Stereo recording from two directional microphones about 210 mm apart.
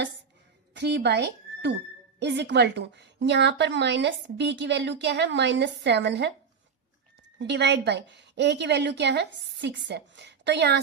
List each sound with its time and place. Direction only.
0.7 s a woman's voice: 55° right (ahead or behind)
7.3 s a woman's voice: 55° right (ahead or behind)